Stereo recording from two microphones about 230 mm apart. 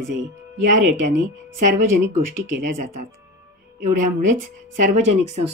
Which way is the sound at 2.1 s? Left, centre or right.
Right.